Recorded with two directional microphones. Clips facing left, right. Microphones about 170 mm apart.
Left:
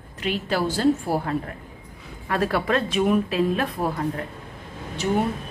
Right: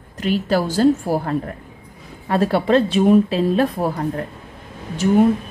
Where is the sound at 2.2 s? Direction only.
30° right (ahead or behind).